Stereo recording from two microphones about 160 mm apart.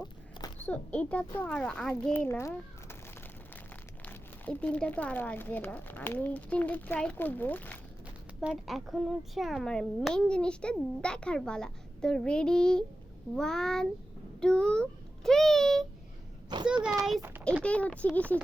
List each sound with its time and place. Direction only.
0.0 s a sound: 25° left (ahead or behind)
0.6 s speech: 10° left (ahead or behind)
4.0 s speech: 10° left (ahead or behind)
8.4 s a child's voice: centre (ahead or behind)
17.2 s a child's voice: 15° right (ahead or behind)
17.6 s speech: 10° left (ahead or behind)